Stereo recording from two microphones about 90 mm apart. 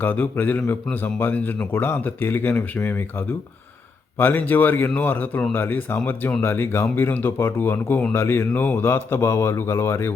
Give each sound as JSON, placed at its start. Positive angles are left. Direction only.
{"t": 0.0, "sound": "a man's voice", "side_deg": 20}